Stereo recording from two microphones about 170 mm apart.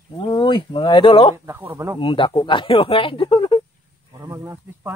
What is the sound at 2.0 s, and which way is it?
Speech, 30° left (ahead or behind).